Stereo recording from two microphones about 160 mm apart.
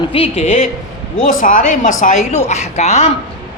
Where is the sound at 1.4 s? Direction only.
55° left (ahead or behind).